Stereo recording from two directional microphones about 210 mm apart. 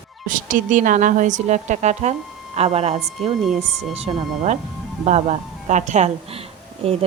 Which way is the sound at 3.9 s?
30° right (ahead or behind).